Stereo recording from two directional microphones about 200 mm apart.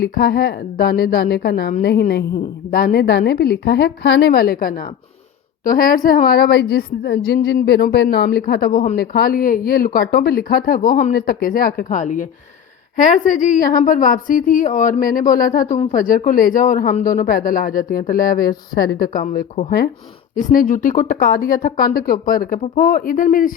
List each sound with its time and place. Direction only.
0.0 s a woman's voice: 50° left (ahead or behind)